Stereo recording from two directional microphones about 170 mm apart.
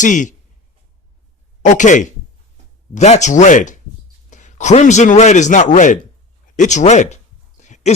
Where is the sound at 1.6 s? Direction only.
45° left (ahead or behind).